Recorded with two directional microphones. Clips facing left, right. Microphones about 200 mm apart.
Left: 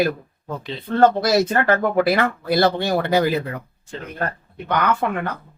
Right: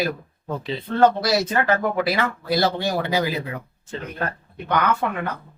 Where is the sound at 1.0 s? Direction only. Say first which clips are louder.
Left 2 dB; 45° left (ahead or behind).